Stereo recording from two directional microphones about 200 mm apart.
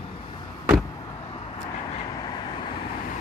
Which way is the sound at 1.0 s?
25° left (ahead or behind).